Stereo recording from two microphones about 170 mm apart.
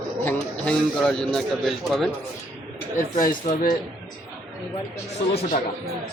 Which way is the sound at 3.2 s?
60° left (ahead or behind).